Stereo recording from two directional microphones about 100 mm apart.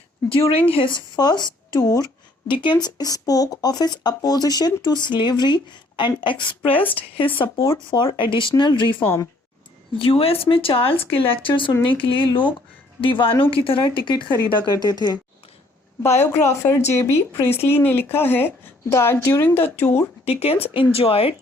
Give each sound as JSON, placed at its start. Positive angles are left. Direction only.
{"t": 0.7, "sound": "speech", "side_deg": 55}
{"t": 2.5, "sound": "speech", "side_deg": 55}
{"t": 2.8, "sound": "speech", "side_deg": 40}
{"t": 6.7, "sound": "speech", "side_deg": 15}
{"t": 7.3, "sound": "speech", "side_deg": 60}
{"t": 9.0, "sound": "speech", "side_deg": 25}
{"t": 10.0, "sound": "speech", "side_deg": 65}
{"t": 16.0, "sound": "speech", "side_deg": 25}
{"t": 20.2, "sound": "speech", "side_deg": 90}
{"t": 20.9, "sound": "speech", "side_deg": 75}